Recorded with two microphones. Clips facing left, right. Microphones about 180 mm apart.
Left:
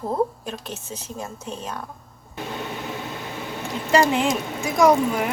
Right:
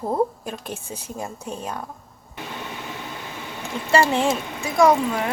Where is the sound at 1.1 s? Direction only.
10° right (ahead or behind).